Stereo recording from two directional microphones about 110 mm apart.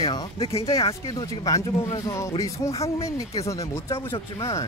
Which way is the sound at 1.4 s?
30° left (ahead or behind).